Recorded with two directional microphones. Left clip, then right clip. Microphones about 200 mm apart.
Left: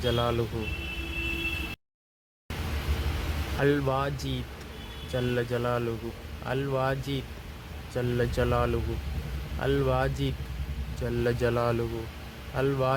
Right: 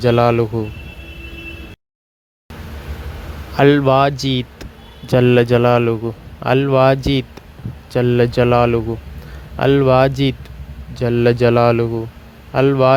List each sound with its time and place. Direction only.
0.0 s speech: 45° right (ahead or behind)
3.6 s speech: 45° right (ahead or behind)